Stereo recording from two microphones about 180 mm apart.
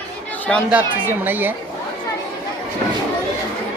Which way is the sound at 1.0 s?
10° right (ahead or behind).